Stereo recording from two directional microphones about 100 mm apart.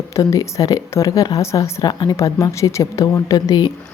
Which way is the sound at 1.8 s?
45° left (ahead or behind).